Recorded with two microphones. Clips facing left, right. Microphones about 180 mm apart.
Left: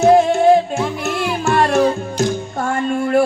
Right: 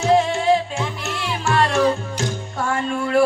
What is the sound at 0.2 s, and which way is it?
Music, 45° left (ahead or behind).